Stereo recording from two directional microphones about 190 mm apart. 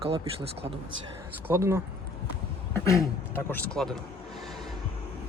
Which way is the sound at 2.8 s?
15° left (ahead or behind).